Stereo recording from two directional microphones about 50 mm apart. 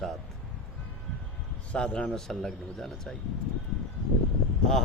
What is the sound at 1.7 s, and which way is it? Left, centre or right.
Speech, left.